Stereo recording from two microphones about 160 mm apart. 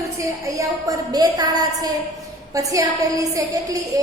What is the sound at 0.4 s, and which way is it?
A woman's voice, 20° right (ahead or behind).